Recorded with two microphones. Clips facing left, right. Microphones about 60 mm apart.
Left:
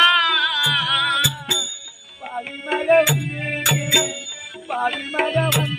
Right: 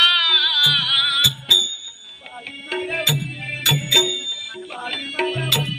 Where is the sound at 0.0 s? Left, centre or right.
Centre.